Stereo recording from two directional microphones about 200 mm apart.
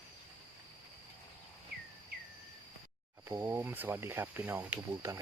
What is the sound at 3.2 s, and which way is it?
Speech, 10° right (ahead or behind).